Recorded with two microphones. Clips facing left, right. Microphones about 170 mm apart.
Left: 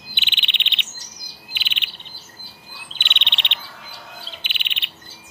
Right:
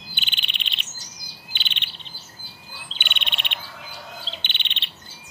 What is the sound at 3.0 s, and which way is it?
Chirp, 50° right (ahead or behind).